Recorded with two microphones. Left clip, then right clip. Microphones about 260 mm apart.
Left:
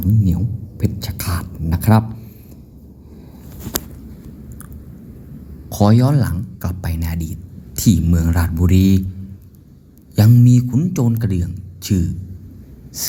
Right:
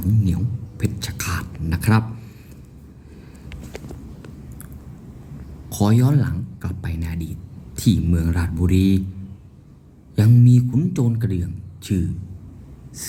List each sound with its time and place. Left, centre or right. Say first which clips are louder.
0.8 s speech: left 1 dB; centre
5.6 s a man's voice: left 5 dB; centre
10.2 s a man's voice: left 3 dB; centre